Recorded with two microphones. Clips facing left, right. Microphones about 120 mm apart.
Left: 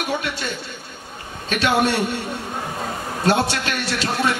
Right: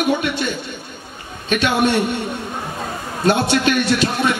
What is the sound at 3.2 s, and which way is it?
Speech, 20° right (ahead or behind).